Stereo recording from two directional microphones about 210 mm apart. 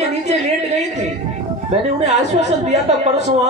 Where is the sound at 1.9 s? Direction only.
30° right (ahead or behind).